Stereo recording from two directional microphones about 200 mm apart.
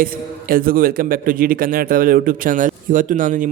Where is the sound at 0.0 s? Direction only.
45° right (ahead or behind).